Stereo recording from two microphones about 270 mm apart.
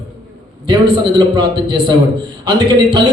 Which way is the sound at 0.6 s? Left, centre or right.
Centre.